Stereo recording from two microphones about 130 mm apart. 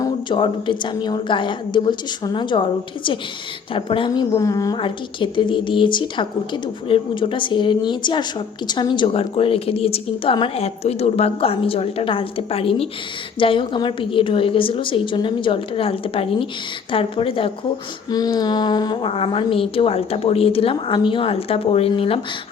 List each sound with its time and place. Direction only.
0.3 s a woman's voice: 40° left (ahead or behind)
4.8 s a woman's voice: 40° left (ahead or behind)
18.1 s a woman's voice: 30° left (ahead or behind)
19.1 s a woman's voice: 45° left (ahead or behind)